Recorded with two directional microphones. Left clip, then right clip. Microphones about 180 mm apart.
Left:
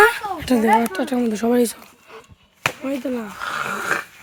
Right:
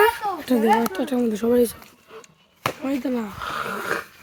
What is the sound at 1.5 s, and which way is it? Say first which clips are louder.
Speech: even; 40° left (ahead or behind).